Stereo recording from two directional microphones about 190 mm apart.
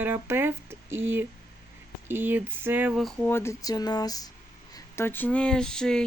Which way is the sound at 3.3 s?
15° left (ahead or behind).